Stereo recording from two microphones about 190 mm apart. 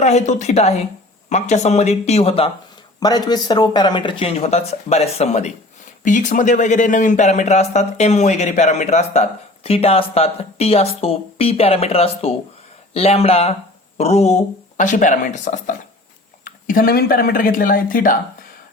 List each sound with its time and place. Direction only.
0.0 s speech: 35° left (ahead or behind)